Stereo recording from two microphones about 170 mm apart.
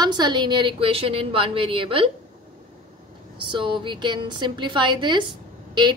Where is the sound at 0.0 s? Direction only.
25° right (ahead or behind).